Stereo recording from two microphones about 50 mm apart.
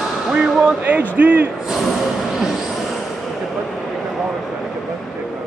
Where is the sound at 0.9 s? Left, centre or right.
Right.